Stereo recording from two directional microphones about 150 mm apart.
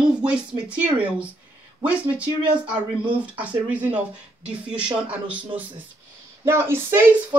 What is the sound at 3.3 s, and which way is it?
Speech, 10° right (ahead or behind).